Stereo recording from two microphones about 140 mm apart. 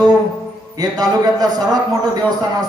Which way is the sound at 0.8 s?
25° right (ahead or behind).